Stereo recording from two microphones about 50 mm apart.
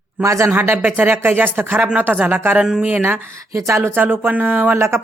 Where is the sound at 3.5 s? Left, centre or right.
Right.